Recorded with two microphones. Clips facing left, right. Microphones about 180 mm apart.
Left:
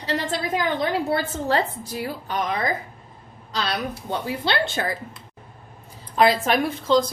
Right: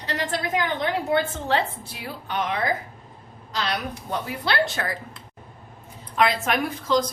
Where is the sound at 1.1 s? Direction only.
40° left (ahead or behind).